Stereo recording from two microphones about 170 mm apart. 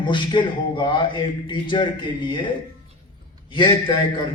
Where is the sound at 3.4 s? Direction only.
25° left (ahead or behind).